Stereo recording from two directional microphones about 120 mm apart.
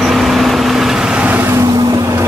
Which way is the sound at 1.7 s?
35° right (ahead or behind).